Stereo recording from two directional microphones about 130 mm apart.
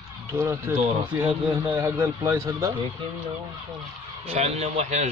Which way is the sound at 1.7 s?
20° right (ahead or behind).